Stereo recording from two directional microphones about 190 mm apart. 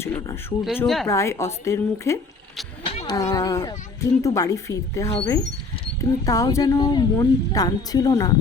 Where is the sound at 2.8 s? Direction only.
30° left (ahead or behind).